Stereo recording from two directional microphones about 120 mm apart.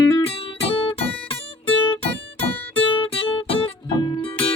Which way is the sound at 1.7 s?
45° left (ahead or behind).